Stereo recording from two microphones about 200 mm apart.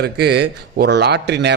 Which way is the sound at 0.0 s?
55° right (ahead or behind).